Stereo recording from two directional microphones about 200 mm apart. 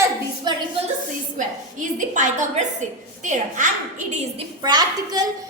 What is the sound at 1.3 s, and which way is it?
A woman's voice, 40° right (ahead or behind).